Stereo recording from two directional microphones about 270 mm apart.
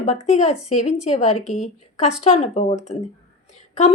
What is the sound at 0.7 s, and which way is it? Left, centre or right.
A woman's voice, left.